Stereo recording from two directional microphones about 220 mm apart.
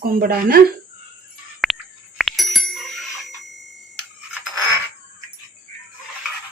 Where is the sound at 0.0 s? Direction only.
40° right (ahead or behind).